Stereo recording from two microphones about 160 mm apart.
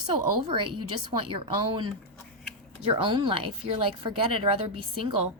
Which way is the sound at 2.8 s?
35° right (ahead or behind).